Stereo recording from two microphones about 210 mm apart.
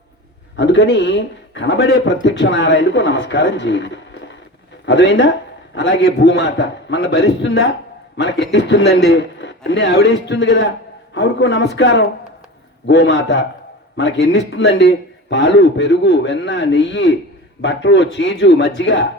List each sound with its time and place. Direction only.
0.5 s a man's voice: 60° left (ahead or behind)